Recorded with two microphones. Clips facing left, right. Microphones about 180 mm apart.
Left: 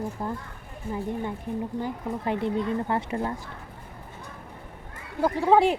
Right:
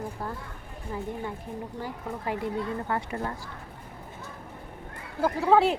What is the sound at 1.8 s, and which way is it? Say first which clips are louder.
Speech: left 4 dB; 25° left (ahead or behind).